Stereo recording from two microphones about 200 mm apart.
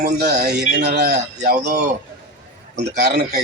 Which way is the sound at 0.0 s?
45° right (ahead or behind).